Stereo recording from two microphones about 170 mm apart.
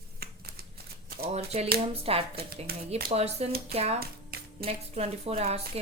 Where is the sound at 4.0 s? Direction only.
65° right (ahead or behind).